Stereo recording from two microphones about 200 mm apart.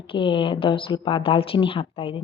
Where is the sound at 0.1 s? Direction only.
25° left (ahead or behind).